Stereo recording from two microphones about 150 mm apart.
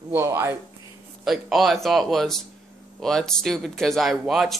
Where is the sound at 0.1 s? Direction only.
15° right (ahead or behind).